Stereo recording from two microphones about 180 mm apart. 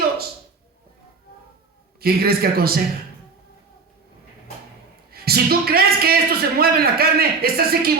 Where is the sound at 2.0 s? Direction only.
60° right (ahead or behind).